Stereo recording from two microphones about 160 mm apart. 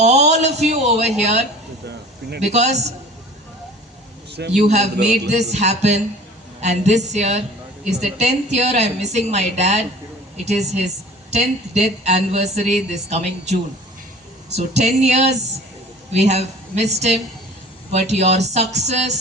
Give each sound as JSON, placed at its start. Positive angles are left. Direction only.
{"t": 0.0, "sound": "speech", "side_deg": -45}
{"t": 2.5, "sound": "speech", "side_deg": -45}
{"t": 4.3, "sound": "a man's voice", "side_deg": -90}
{"t": 4.5, "sound": "speech", "side_deg": -45}
{"t": 11.3, "sound": "speech", "side_deg": -45}